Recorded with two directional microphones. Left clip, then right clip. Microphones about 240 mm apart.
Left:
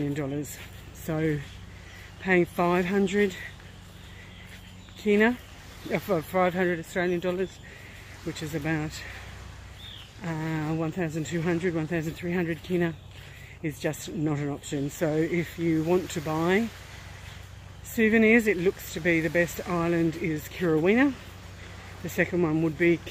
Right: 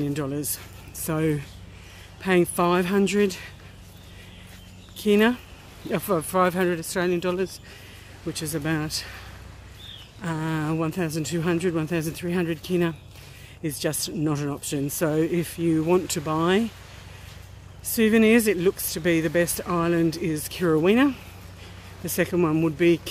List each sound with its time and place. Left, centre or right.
0.0 s speech: centre
5.0 s speech: centre
10.2 s speech: right
17.9 s speech: centre